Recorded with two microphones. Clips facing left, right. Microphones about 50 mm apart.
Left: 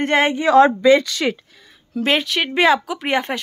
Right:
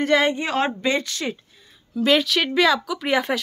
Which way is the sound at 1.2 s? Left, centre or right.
Left.